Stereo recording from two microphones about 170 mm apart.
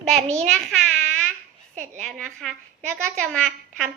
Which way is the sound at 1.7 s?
45° right (ahead or behind).